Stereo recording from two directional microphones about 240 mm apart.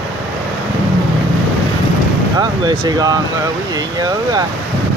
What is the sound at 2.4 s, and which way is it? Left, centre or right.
Speech, centre.